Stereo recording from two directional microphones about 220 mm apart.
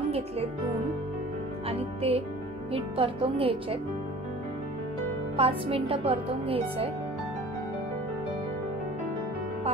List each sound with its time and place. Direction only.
1.7 s a woman's voice: 25° right (ahead or behind)
5.4 s a woman's voice: 25° right (ahead or behind)